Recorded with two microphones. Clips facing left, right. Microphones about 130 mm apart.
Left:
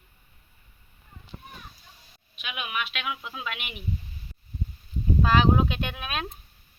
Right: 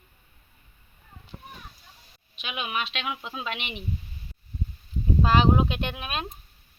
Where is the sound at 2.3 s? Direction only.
30° right (ahead or behind).